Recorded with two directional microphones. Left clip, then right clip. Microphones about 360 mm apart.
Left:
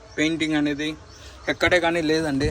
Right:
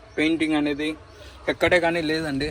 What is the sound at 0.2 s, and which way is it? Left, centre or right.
Speech, centre.